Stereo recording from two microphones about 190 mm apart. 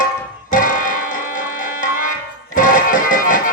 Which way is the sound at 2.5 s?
45° left (ahead or behind).